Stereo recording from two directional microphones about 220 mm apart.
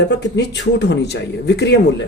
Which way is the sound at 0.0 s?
55° left (ahead or behind).